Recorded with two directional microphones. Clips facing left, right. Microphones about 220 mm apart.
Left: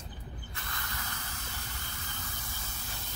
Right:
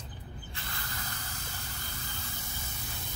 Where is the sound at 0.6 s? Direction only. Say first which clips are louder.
Even; 30° right (ahead or behind).